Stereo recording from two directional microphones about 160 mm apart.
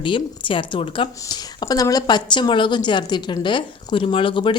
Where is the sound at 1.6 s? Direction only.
20° left (ahead or behind).